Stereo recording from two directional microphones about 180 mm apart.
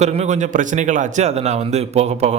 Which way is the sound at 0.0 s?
40° right (ahead or behind).